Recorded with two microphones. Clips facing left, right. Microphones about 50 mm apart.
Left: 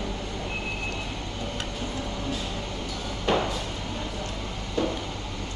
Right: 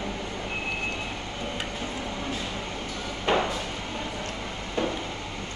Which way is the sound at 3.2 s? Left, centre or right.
Right.